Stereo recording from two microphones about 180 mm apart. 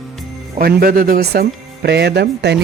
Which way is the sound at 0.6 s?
55° right (ahead or behind).